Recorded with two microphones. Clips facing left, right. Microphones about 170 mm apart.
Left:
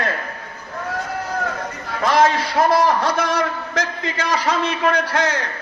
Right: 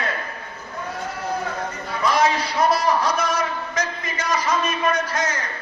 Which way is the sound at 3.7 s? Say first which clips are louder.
Left 3 dB; 70° left (ahead or behind).